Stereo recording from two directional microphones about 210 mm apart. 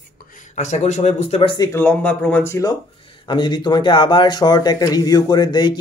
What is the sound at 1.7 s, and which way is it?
Speech, 10° left (ahead or behind).